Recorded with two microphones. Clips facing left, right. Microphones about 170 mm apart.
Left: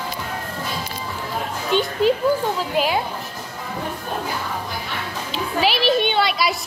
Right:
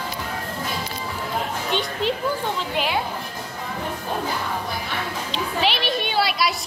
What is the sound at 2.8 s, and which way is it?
Speech, 40° left (ahead or behind).